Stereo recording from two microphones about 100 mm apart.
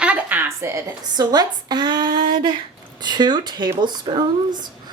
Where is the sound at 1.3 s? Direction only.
45° right (ahead or behind).